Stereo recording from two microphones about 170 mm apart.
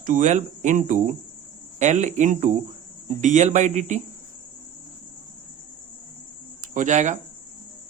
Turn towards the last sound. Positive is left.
turn(degrees=-45)  # may be behind; listen again after turning